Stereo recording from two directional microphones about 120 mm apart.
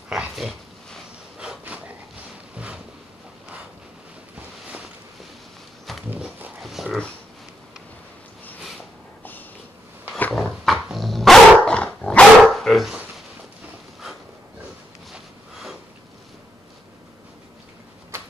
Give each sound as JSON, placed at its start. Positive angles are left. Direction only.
{"t": 0.1, "sound": "dog", "side_deg": 0}
{"t": 1.5, "sound": "a sound", "side_deg": -10}
{"t": 4.4, "sound": "a sound", "side_deg": -10}
{"t": 6.0, "sound": "dog", "side_deg": -10}
{"t": 10.3, "sound": "dog", "side_deg": 0}
{"t": 15.5, "sound": "sniff", "side_deg": 0}